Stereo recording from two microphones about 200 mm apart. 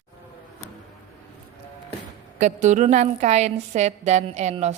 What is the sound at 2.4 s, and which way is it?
A woman's voice, 35° right (ahead or behind).